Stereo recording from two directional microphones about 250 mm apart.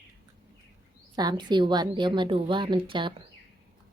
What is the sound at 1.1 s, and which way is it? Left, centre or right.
A woman's voice, centre.